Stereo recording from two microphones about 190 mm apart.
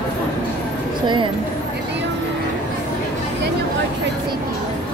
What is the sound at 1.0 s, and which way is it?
Speech, 25° right (ahead or behind).